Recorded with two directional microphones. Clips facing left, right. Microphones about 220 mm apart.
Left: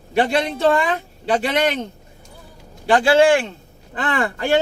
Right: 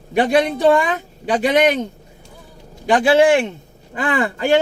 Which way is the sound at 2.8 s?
20° right (ahead or behind).